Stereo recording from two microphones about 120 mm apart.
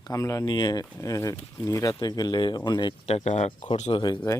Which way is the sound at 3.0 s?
65° left (ahead or behind).